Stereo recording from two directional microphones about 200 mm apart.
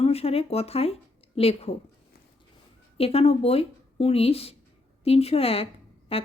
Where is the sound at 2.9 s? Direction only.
30° left (ahead or behind).